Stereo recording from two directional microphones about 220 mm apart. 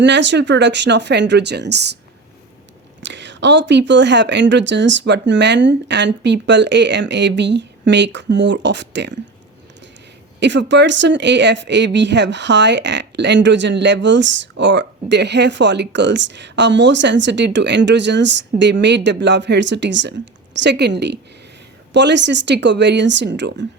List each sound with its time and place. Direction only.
0.0 s speech: 55° right (ahead or behind)
3.0 s speech: 55° right (ahead or behind)
10.4 s speech: 55° right (ahead or behind)